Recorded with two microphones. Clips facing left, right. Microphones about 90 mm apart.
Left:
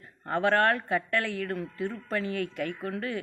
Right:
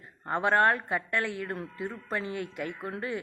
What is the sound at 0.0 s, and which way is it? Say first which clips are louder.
Speech: left 2 dB; 20° right (ahead or behind).